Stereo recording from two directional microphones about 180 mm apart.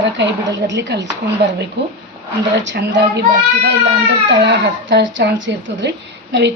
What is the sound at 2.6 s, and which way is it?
Speech, 80° right.